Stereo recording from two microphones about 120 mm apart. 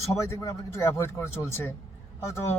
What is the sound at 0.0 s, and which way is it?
Speech, 25° left (ahead or behind).